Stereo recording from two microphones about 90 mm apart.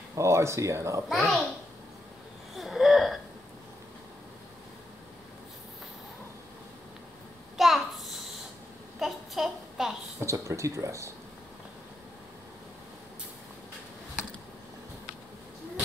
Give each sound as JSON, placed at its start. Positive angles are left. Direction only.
{"t": 0.1, "sound": "speech", "side_deg": -35}
{"t": 1.0, "sound": "a child's voice", "side_deg": 0}
{"t": 2.5, "sound": "wheeze", "side_deg": 0}
{"t": 7.5, "sound": "a sound", "side_deg": 0}
{"t": 10.2, "sound": "speech", "side_deg": -35}